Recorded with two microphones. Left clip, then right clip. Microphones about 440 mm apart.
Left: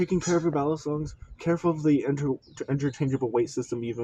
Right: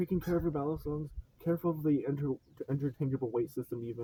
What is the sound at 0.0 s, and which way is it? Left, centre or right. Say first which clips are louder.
Speech: left 8 dB; right.